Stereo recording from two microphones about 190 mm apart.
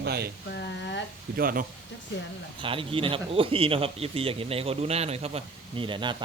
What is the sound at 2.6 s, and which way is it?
Speech, 30° right (ahead or behind).